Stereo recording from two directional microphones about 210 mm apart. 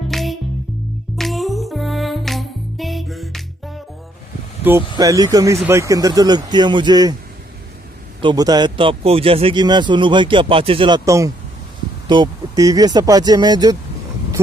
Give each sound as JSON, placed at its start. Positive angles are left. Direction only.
{"t": 0.1, "sound": "music", "side_deg": 0}
{"t": 4.9, "sound": "speech", "side_deg": -15}
{"t": 8.2, "sound": "speech", "side_deg": -20}